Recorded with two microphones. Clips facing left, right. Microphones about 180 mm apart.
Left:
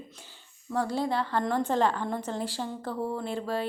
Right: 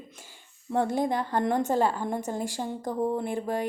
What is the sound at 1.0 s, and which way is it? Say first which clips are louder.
A woman's voice: right 2 dB; 15° right (ahead or behind).